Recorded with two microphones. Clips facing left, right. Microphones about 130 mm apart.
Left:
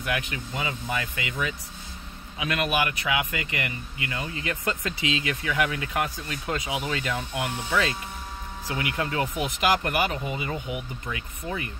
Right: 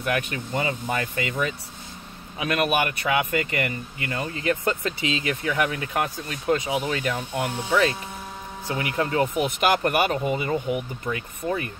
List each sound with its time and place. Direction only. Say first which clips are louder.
0.0 s speech: right 4 dB; 45° right (ahead or behind)
8.6 s speech: right 3 dB; 30° right (ahead or behind)
9.4 s speech: right 1 dB; 45° right (ahead or behind)